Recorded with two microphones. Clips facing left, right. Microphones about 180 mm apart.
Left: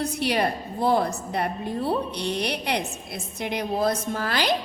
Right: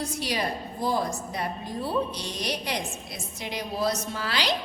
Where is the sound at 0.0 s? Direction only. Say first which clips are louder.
Left 5 dB; 60° left (ahead or behind).